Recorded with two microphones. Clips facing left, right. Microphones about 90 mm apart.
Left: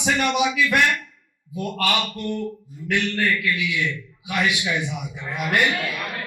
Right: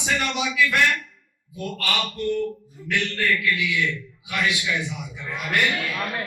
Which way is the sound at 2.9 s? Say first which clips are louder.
Left 2 dB; 25° left (ahead or behind).